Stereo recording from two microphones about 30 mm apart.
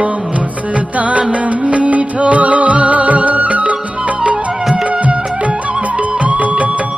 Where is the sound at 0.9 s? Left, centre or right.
Right.